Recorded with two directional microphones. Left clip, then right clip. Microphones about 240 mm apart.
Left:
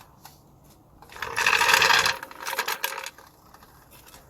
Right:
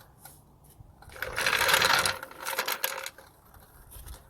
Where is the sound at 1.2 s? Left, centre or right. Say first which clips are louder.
Left 5 dB; right.